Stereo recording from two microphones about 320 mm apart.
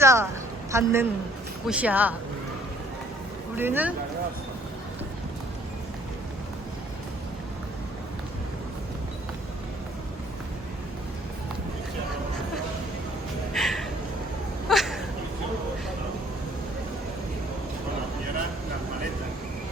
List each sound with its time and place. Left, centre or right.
0.0 s a woman's voice: centre
3.5 s speech: centre
13.5 s a sound: centre